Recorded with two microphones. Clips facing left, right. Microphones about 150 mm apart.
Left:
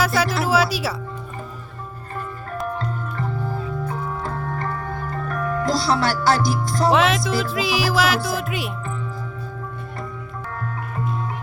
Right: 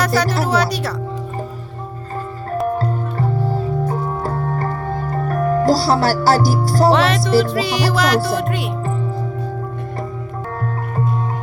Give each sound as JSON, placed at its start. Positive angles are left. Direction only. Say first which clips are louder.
{"t": 0.0, "sound": "speech", "louder": "right 3 dB", "side_deg": 0}
{"t": 2.6, "sound": "music", "louder": "right 6 dB", "side_deg": -35}
{"t": 6.9, "sound": "music", "louder": "right 4 dB", "side_deg": 0}